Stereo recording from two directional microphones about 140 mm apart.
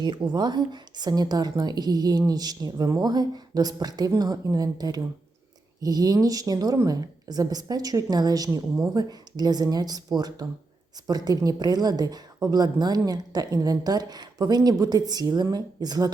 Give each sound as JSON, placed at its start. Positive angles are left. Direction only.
{"t": 0.0, "sound": "a woman's voice", "side_deg": -30}